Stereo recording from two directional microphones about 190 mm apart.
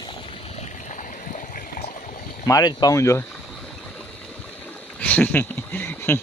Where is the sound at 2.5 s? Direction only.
20° left (ahead or behind).